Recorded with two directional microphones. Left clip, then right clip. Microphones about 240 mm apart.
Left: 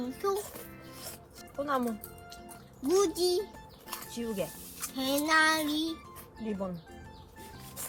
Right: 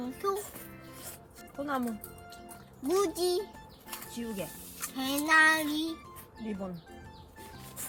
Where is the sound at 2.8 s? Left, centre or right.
Centre.